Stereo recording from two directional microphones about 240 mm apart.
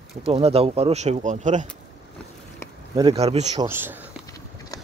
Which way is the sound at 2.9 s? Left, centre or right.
Right.